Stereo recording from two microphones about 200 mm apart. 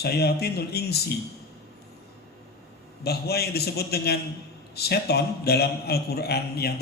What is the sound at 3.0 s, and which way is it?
A man's voice, 50° left (ahead or behind).